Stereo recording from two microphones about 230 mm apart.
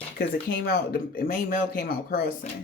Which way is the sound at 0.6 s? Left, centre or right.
Left.